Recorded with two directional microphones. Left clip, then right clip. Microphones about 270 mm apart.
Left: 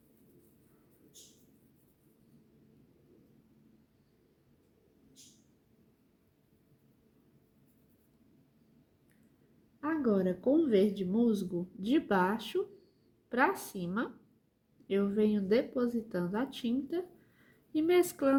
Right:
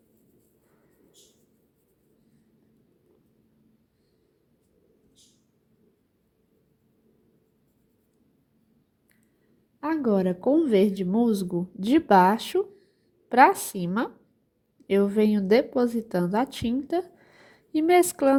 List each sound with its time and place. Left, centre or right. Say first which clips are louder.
9.8 s speech: right 6 dB; right